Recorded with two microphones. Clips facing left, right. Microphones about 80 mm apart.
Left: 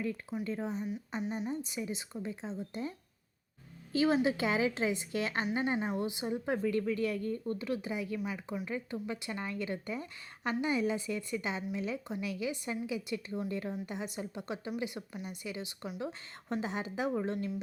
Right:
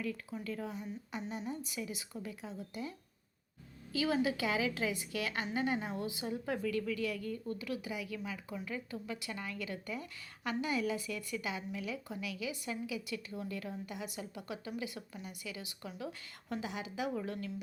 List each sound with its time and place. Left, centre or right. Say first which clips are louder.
0.0 s a woman's voice: left 4 dB; left
3.9 s a woman's voice: left 4 dB; left